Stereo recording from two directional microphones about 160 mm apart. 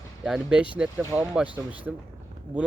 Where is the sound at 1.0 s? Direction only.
15° right (ahead or behind).